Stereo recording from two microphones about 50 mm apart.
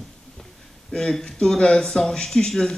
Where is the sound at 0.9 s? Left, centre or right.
Centre.